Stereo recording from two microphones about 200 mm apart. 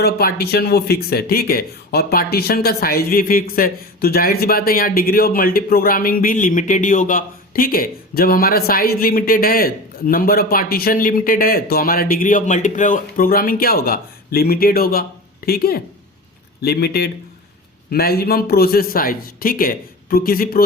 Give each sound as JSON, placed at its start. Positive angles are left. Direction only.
{"t": 0.0, "sound": "speech", "side_deg": 50}